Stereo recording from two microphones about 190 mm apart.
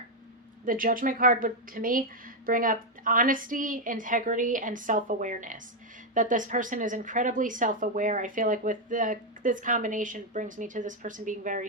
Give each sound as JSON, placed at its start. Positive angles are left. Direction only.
{"t": 0.6, "sound": "a woman's voice", "side_deg": -45}